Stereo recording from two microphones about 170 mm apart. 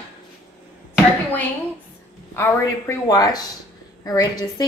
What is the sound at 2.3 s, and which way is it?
A woman's voice, 15° left (ahead or behind).